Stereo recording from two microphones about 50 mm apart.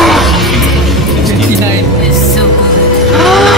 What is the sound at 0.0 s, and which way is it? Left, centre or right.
Music, centre.